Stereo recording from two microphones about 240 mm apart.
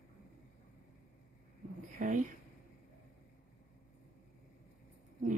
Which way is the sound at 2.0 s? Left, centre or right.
Right.